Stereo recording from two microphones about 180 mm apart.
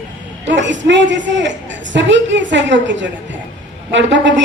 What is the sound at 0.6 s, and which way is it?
A woman's voice, 90° right.